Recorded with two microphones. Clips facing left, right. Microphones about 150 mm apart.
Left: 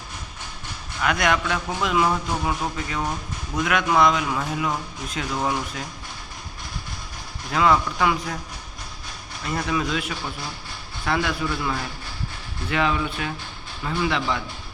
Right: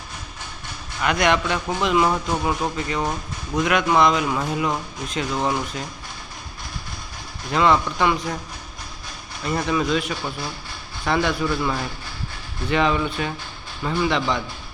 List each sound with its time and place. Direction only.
1.0 s a man's voice: centre (ahead or behind)
7.5 s a man's voice: 5° left (ahead or behind)
9.5 s a man's voice: centre (ahead or behind)